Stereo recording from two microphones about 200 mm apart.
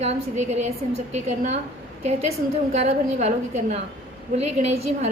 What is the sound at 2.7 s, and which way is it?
A woman's voice, 35° right (ahead or behind).